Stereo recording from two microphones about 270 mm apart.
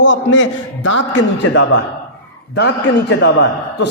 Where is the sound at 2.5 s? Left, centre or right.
Left.